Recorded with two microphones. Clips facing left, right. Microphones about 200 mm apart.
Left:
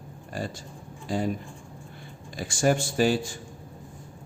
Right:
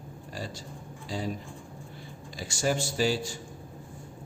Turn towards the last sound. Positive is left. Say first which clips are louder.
# left 4 dB
turn(degrees=55)  # may be behind; listen again after turning